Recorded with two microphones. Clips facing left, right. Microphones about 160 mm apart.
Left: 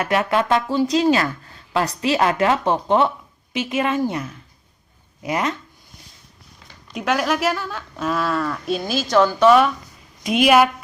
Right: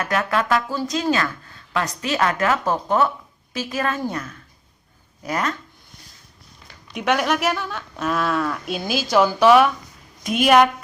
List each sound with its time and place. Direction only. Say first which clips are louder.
0.3 s speech: left 2 dB; 25° left (ahead or behind)
3.9 s speech: left 5 dB; 10° left (ahead or behind)
6.9 s speech: even; centre (ahead or behind)